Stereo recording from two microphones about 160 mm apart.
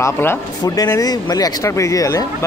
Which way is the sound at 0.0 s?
15° left (ahead or behind).